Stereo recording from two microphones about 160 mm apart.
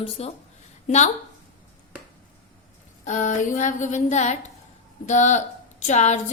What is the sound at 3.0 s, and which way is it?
A woman's voice, 50° left (ahead or behind).